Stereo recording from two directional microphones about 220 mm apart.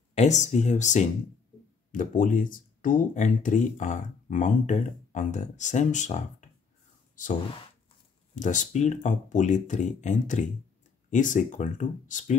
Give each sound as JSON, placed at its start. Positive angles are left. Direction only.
{"t": 0.1, "sound": "speech", "side_deg": 30}
{"t": 8.4, "sound": "speech", "side_deg": 35}